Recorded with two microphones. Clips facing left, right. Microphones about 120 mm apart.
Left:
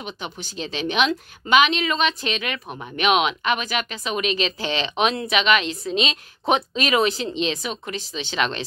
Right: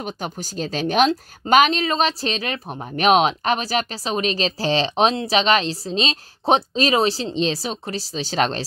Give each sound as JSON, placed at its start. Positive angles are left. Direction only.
{"t": 0.0, "sound": "speech", "side_deg": -40}